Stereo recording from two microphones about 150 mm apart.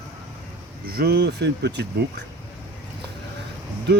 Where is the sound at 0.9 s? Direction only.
90° right.